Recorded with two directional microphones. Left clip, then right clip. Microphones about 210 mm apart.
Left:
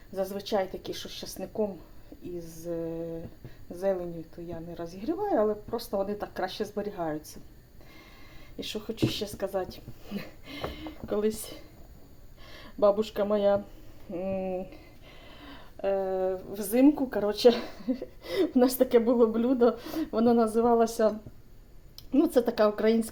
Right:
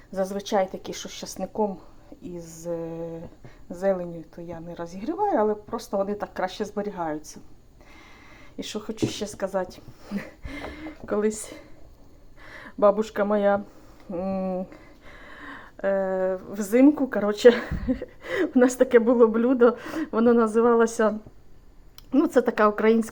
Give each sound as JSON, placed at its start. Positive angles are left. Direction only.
{"t": 0.1, "sound": "a woman's voice", "side_deg": -20}
{"t": 8.5, "sound": "a woman's voice", "side_deg": -20}
{"t": 22.1, "sound": "a woman's voice", "side_deg": -15}